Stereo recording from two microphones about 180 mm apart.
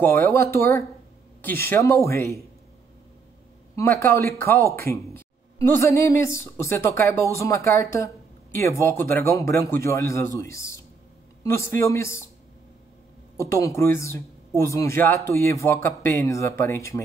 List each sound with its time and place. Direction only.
0.0 s a woman's voice: 15° left (ahead or behind)
3.7 s a woman's voice: 15° left (ahead or behind)
13.4 s a woman's voice: 15° left (ahead or behind)